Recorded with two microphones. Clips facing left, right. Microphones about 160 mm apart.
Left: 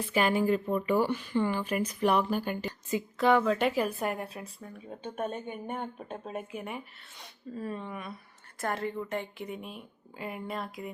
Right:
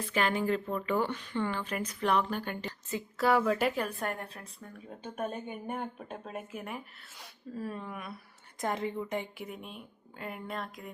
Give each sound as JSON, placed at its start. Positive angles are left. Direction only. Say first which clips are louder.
{"t": 0.1, "sound": "speech", "louder": "left 3 dB", "side_deg": 10}
{"t": 5.3, "sound": "speech", "louder": "left 1 dB", "side_deg": -5}
{"t": 8.6, "sound": "a woman's voice", "louder": "even", "side_deg": -15}
{"t": 9.5, "sound": "speech", "louder": "left 3 dB", "side_deg": 0}